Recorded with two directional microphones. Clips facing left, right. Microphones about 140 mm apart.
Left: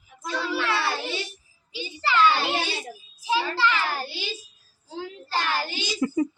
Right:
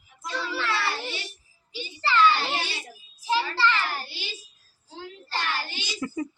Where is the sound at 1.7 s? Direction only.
15° left (ahead or behind).